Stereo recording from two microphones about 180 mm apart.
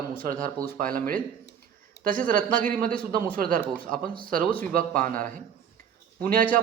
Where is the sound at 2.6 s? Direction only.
50° right (ahead or behind).